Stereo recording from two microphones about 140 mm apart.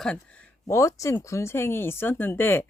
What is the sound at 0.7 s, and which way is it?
Speech, 20° left (ahead or behind).